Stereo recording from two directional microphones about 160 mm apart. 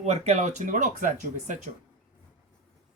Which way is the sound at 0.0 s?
45° right (ahead or behind).